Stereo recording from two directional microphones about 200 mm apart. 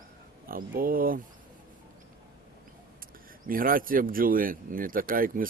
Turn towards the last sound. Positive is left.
turn(degrees=-45)  # may be behind; listen again after turning